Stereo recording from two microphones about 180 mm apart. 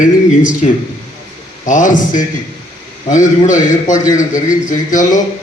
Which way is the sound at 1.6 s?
45° left (ahead or behind).